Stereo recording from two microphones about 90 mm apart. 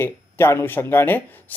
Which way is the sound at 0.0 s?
25° left (ahead or behind).